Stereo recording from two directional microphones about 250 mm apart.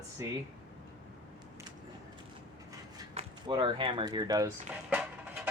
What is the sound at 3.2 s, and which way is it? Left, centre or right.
Speech, centre.